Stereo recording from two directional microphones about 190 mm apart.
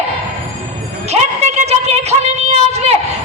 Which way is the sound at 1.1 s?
35° right (ahead or behind).